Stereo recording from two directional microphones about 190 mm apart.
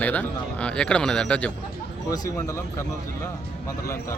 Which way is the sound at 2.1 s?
20° left (ahead or behind).